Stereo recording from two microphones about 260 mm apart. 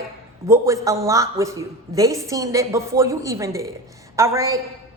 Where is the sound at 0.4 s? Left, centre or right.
Centre.